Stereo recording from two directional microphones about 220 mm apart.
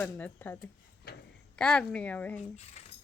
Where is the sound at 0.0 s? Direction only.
10° left (ahead or behind).